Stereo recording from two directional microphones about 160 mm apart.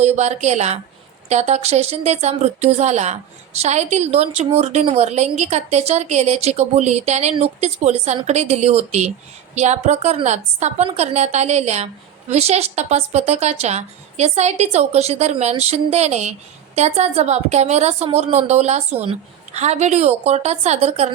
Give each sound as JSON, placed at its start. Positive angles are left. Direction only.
{"t": 0.0, "sound": "a woman's voice", "side_deg": -45}